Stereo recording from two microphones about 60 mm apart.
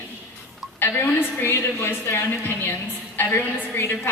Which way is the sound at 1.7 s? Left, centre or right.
Left.